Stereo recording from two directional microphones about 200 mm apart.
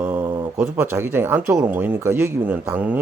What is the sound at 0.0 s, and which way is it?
Mantra, 5° right (ahead or behind).